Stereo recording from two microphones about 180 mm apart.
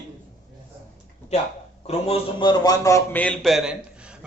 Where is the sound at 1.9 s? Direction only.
35° left (ahead or behind); by 3.8 s centre (ahead or behind).